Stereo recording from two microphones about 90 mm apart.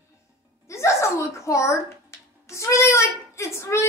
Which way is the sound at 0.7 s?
30° left (ahead or behind).